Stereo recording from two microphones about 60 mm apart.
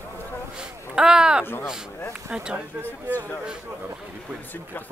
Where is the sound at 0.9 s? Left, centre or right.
Centre.